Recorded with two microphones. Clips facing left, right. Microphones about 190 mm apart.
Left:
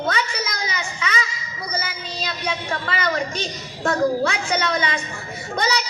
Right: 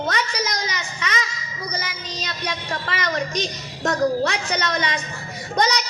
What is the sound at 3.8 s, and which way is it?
A woman's voice, 40° right (ahead or behind).